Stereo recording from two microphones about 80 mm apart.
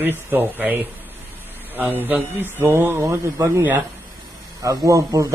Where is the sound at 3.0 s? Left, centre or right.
Right.